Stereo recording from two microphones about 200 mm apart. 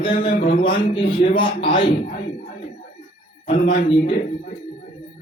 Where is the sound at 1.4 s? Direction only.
25° left (ahead or behind).